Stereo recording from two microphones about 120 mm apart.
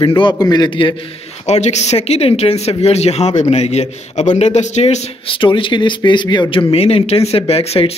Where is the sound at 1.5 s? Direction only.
70° left (ahead or behind).